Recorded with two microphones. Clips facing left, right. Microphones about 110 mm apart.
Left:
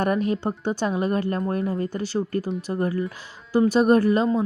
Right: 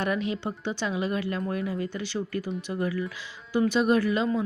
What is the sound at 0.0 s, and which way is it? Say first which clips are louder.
Speech: left 5 dB; 45° left (ahead or behind).